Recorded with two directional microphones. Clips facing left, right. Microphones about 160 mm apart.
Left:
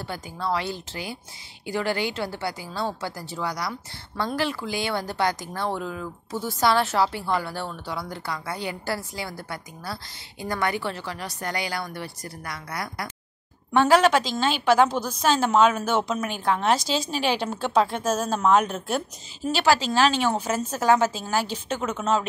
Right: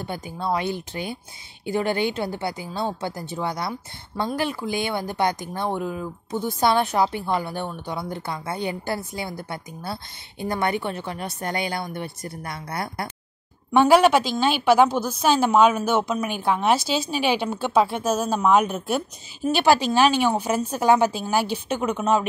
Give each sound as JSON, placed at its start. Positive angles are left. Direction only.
{"t": 0.0, "sound": "a woman's voice", "side_deg": -20}
{"t": 1.7, "sound": "a woman's voice", "side_deg": -20}
{"t": 13.7, "sound": "a woman's voice", "side_deg": -10}